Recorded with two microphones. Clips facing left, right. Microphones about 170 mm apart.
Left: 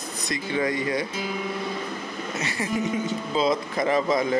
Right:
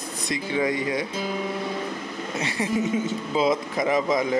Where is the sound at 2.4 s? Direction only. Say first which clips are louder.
Right 2 dB; 25° right (ahead or behind).